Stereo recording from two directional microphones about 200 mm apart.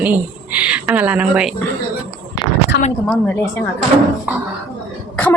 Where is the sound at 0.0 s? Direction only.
10° right (ahead or behind).